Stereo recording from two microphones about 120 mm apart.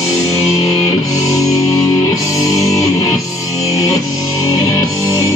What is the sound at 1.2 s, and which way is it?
Music, 30° left (ahead or behind).